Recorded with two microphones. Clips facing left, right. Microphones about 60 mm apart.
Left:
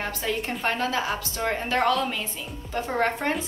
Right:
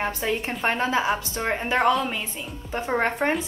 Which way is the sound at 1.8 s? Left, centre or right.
Centre.